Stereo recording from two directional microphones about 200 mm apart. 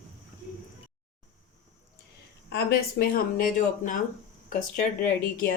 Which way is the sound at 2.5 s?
50° left (ahead or behind).